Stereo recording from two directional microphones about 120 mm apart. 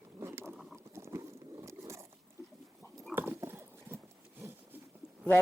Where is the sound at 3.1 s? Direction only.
20° right (ahead or behind).